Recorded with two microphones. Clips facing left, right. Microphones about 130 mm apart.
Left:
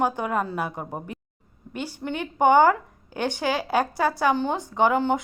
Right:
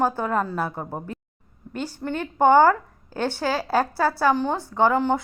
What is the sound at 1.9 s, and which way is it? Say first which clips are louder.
A woman's voice: right 1 dB; 40° right (ahead or behind).